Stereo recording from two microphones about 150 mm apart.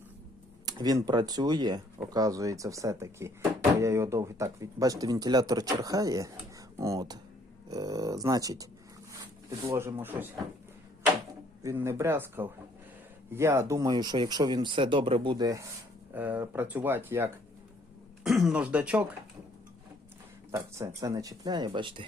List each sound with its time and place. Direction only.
0.6 s speech: 25° right (ahead or behind)
11.6 s speech: 15° right (ahead or behind)
16.1 s speech: 10° right (ahead or behind)
18.2 s speech: centre (ahead or behind)
20.5 s speech: 20° right (ahead or behind)